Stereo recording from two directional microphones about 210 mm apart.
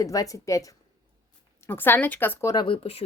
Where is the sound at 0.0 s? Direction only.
15° left (ahead or behind).